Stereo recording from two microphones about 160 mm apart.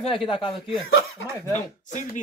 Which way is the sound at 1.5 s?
50° left (ahead or behind).